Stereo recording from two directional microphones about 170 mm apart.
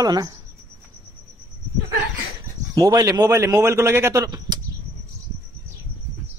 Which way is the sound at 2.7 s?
20° right (ahead or behind).